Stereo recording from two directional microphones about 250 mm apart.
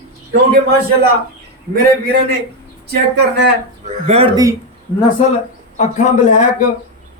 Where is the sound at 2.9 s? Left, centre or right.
Right.